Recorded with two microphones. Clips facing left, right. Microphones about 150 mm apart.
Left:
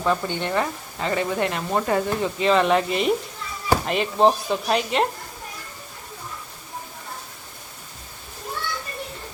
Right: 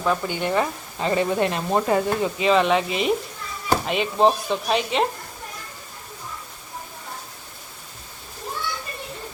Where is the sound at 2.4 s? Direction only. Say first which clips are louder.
Even; centre (ahead or behind).